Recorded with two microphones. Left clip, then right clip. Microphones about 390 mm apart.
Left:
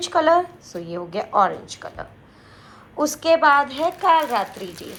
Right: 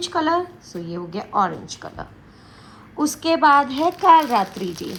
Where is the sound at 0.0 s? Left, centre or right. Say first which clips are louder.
Left 4 dB; centre.